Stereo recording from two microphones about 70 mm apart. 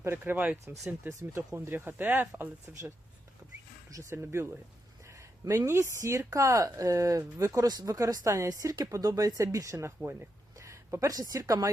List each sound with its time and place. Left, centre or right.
0.0 s speech: right
1.0 s speech: right
4.1 s speech: right
5.0 s a sound: right
5.5 s speech: right
7.7 s speech: right
9.4 s a woman's voice: right